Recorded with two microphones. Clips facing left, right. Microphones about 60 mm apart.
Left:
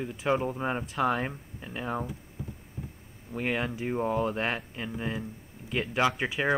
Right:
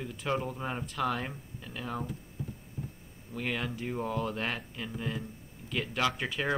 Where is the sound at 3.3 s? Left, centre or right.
Left.